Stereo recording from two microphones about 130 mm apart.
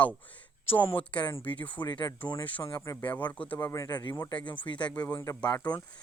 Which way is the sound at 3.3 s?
10° left (ahead or behind).